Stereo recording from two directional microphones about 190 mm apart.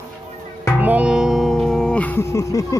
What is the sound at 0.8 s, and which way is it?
Music, 10° right (ahead or behind).